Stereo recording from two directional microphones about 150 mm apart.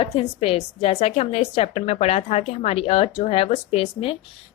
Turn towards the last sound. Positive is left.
turn(degrees=40)  # may be behind; listen again after turning